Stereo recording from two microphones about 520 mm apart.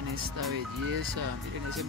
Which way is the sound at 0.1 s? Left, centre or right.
Right.